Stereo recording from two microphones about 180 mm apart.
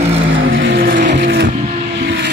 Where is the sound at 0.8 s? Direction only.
50° right (ahead or behind).